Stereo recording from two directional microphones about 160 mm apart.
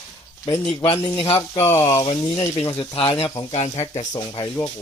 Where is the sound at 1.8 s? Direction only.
20° left (ahead or behind).